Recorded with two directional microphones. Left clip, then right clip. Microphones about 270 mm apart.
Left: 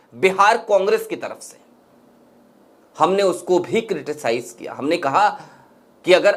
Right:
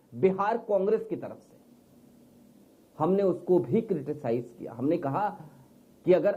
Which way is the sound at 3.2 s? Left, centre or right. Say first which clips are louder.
Left 7 dB; left.